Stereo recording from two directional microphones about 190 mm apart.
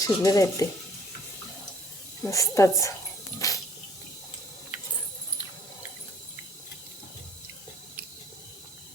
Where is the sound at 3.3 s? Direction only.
15° left (ahead or behind).